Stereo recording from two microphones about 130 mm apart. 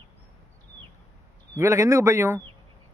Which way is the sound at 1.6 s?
25° right (ahead or behind).